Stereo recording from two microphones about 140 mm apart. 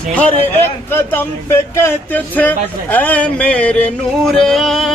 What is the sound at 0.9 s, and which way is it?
Speech, 15° left (ahead or behind).